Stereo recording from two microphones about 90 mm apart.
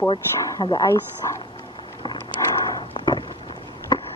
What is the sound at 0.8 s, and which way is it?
Speech, 30° left (ahead or behind).